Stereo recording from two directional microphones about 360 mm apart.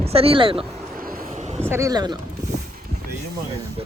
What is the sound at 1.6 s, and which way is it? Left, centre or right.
Speech, centre.